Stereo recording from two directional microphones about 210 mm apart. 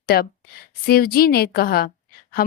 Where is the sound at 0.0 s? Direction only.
50° left (ahead or behind).